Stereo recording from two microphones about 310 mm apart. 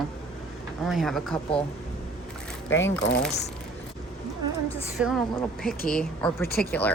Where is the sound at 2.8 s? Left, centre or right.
Left.